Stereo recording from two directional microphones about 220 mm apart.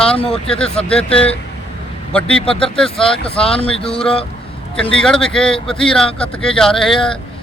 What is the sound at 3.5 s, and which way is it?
Speech, 5° left (ahead or behind).